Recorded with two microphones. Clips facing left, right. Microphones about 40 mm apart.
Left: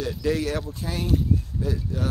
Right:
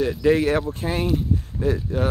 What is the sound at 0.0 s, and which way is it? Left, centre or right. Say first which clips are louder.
Speech: right 7 dB; right.